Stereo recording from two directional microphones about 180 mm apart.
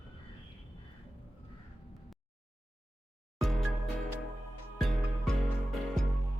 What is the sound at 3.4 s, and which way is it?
Music, centre (ahead or behind).